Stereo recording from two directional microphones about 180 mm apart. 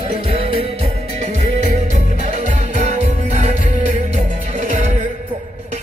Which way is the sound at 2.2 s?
45° right (ahead or behind).